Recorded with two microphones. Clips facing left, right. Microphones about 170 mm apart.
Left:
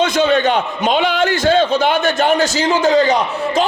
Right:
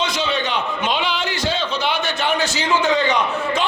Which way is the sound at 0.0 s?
50° left (ahead or behind).